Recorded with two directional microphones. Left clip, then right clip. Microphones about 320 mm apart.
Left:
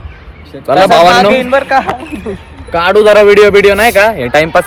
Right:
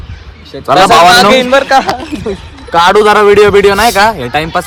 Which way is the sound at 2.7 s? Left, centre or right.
Centre.